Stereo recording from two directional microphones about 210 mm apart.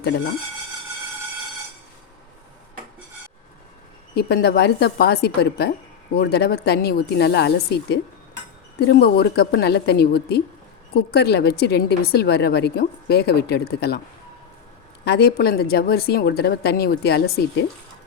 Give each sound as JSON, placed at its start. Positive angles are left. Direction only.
{"t": 4.1, "sound": "a woman's voice", "side_deg": 50}
{"t": 15.0, "sound": "a woman's voice", "side_deg": 50}